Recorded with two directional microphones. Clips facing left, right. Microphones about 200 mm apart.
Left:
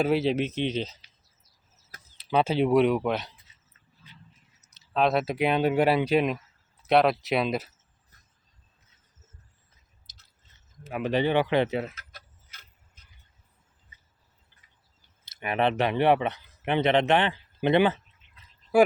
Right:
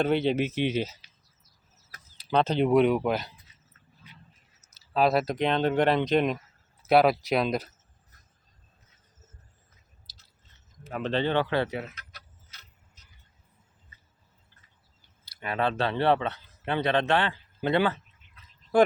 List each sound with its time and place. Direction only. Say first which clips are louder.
0.0 s speech: even; 5° left (ahead or behind)
2.1 s speech: left 1 dB; 5° left (ahead or behind)
4.9 s speech: even; centre (ahead or behind)
10.8 s speech: left 2 dB; 10° left (ahead or behind)
15.2 s speech: left 3 dB; 20° left (ahead or behind)